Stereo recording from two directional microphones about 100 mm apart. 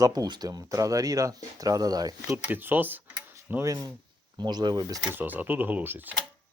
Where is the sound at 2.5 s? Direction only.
20° right (ahead or behind).